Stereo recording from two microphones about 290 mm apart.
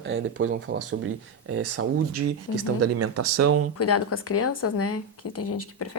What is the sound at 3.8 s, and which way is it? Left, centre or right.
Speech, left.